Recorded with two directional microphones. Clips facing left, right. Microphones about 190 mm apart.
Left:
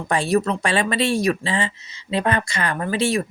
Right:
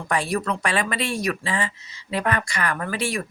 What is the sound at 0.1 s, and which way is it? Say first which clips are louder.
Speech: left 4 dB; 25° left (ahead or behind).